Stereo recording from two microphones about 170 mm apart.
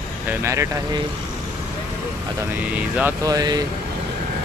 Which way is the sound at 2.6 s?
10° right (ahead or behind).